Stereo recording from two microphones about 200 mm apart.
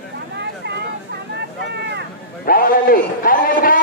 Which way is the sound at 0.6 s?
60° right (ahead or behind).